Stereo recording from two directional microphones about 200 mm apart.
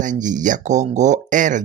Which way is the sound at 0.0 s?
40° right (ahead or behind).